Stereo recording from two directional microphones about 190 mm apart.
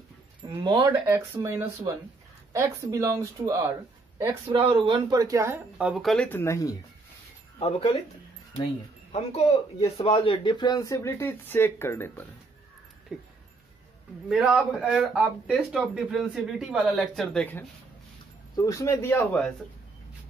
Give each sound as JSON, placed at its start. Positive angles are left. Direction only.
{"t": 0.4, "sound": "speech", "side_deg": -25}
{"t": 4.6, "sound": "speech", "side_deg": -30}
{"t": 7.5, "sound": "speech", "side_deg": 30}
{"t": 9.1, "sound": "speech", "side_deg": 35}
{"t": 14.3, "sound": "speech", "side_deg": 0}